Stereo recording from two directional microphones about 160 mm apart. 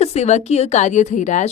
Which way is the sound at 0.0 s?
40° left (ahead or behind).